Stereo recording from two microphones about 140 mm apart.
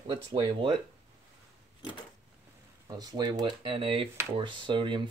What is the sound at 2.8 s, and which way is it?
Speech, 30° right (ahead or behind).